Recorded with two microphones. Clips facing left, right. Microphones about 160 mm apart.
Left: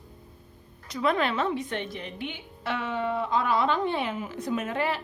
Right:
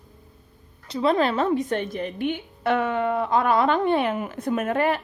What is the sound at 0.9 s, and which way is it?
A woman's voice, 30° right (ahead or behind).